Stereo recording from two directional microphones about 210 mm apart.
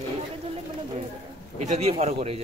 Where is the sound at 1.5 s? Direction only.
35° right (ahead or behind).